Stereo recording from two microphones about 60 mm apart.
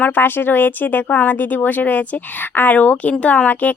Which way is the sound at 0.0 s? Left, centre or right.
Left.